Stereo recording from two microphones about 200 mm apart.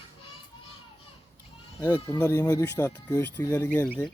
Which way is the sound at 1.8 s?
20° left (ahead or behind).